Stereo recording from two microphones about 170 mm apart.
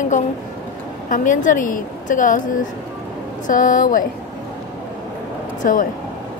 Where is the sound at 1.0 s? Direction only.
50° left (ahead or behind).